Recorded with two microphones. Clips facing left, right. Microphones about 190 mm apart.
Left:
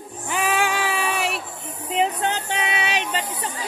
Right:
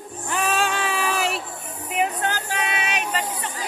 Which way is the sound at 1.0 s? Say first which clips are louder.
Right 1 dB; centre (ahead or behind).